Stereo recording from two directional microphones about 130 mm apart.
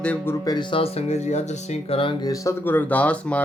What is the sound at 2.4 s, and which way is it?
Speech, 15° left (ahead or behind).